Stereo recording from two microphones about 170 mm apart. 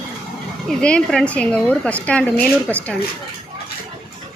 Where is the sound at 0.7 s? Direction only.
5° left (ahead or behind).